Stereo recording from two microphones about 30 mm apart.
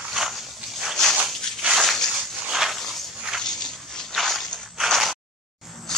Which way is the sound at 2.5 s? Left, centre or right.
Centre.